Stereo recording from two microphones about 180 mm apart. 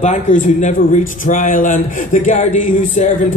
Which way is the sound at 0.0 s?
40° left (ahead or behind).